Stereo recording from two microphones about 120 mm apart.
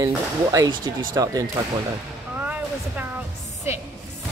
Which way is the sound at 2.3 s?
15° right (ahead or behind).